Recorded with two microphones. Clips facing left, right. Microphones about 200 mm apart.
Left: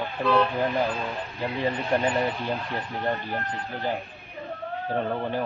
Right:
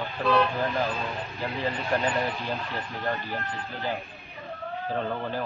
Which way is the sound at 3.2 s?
50° left (ahead or behind).